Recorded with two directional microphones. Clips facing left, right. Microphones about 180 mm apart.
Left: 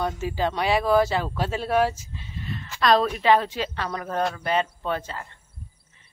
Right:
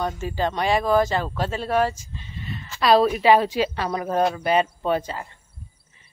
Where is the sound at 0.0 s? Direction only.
5° left (ahead or behind).